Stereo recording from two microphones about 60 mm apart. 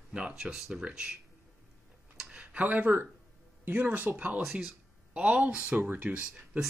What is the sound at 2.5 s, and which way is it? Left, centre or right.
Speech, right.